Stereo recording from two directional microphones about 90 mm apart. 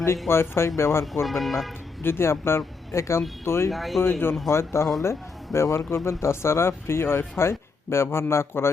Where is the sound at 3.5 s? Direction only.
35° left (ahead or behind).